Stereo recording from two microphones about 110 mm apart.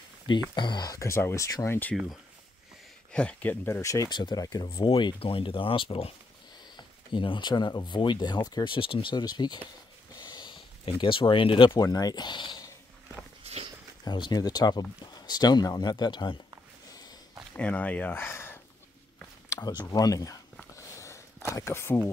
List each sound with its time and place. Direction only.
0.6 s speech: 40° left (ahead or behind); by 2.0 s 20° left (ahead or behind)
3.1 s speech: 10° left (ahead or behind)
3.6 s speech: 25° left (ahead or behind)
4.1 s speech: 40° left (ahead or behind)
4.8 s speech: 55° left (ahead or behind)
10.2 s a sound: 40° left (ahead or behind)
11.8 s speech: 35° left (ahead or behind)
13.4 s walk: 65° right (ahead or behind)
14.0 s speech: 40° left (ahead or behind)
17.6 s speech: 15° left (ahead or behind)
19.9 s speech: 35° left (ahead or behind)
20.7 s a sound: 25° left (ahead or behind)